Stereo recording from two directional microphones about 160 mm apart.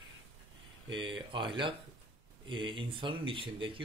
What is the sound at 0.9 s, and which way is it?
Speech, 30° right (ahead or behind).